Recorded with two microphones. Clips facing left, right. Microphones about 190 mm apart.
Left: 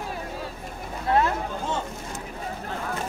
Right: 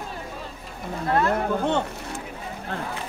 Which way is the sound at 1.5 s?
65° right (ahead or behind).